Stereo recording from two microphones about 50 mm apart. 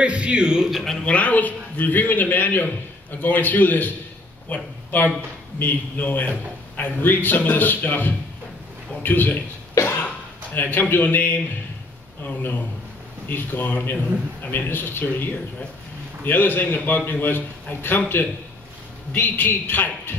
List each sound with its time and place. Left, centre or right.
0.0 s speech: right
1.0 s a man's voice: left
9.8 s a sound: left
12.2 s a man's voice: left